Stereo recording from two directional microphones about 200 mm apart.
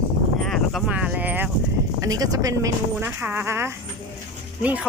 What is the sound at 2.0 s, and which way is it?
Speech, 20° right (ahead or behind).